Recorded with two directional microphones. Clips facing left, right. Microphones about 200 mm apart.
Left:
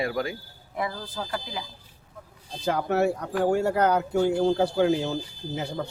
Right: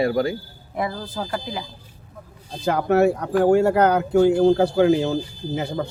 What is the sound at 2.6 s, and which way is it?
A man's voice, 70° right (ahead or behind).